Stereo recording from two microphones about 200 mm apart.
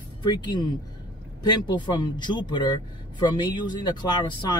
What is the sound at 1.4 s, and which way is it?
Speech, 20° left (ahead or behind).